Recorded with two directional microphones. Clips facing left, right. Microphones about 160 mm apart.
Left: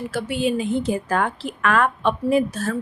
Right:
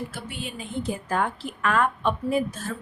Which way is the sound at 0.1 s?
90° left.